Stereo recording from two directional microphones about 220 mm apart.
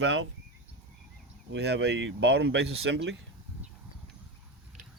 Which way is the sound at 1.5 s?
50° right (ahead or behind).